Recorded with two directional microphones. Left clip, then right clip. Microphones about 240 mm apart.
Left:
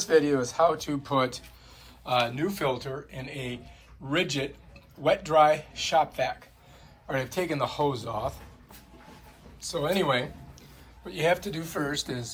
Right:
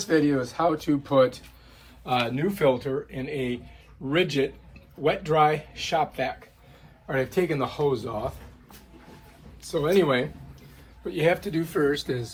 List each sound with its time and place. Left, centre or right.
0.1 s speech: centre
9.7 s speech: centre